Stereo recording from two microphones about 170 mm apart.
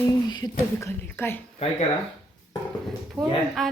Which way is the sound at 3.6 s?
Centre (ahead or behind).